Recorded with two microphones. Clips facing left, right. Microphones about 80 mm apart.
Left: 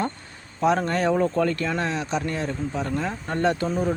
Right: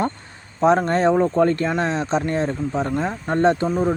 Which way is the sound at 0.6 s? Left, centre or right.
Right.